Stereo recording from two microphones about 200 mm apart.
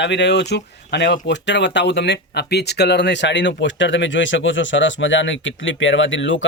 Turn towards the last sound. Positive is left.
turn(degrees=70)  # may be behind; listen again after turning